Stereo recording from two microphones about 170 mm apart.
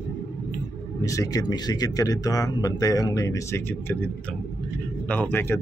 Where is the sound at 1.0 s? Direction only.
20° left (ahead or behind).